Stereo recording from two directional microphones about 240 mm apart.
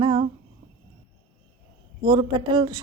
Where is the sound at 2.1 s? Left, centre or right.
Centre.